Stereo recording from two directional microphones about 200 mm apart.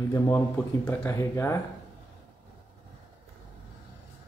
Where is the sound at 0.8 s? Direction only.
15° left (ahead or behind).